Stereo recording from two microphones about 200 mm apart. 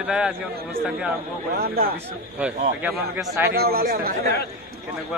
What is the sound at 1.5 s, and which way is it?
Speech, 50° right (ahead or behind).